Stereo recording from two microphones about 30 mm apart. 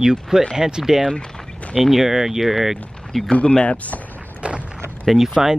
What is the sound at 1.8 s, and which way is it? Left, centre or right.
Speech, centre.